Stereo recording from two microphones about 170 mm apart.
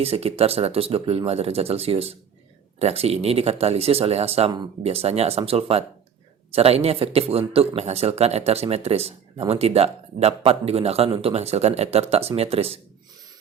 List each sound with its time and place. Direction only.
0.0 s speech: 35° right (ahead or behind)